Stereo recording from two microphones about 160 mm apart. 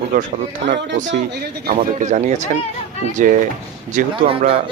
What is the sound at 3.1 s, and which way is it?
Speech, 55° right (ahead or behind).